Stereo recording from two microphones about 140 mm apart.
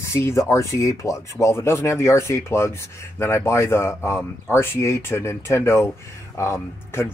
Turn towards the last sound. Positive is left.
turn(degrees=20)  # may be behind; listen again after turning